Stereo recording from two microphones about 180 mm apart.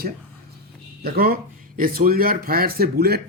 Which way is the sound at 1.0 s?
55° right (ahead or behind).